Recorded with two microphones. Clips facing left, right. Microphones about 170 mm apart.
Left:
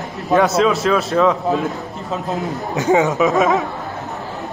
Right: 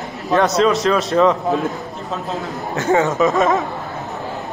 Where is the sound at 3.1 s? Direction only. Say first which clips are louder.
Even; centre (ahead or behind).